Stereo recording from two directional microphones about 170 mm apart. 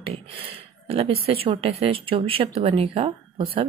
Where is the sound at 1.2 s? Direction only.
35° right (ahead or behind).